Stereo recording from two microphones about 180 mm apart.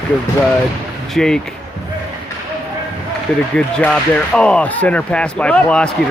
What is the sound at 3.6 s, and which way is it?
Speech, 5° left (ahead or behind).